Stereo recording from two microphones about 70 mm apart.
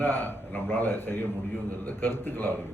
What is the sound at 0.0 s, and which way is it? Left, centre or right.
A man's voice, left.